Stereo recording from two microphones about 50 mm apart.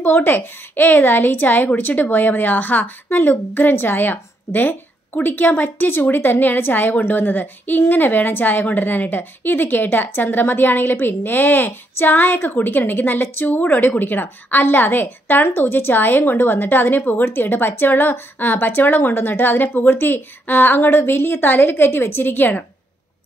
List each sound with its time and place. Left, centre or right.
0.0 s speech: left